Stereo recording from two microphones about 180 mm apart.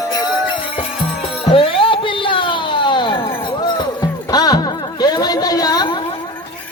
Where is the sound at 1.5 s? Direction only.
30° left (ahead or behind).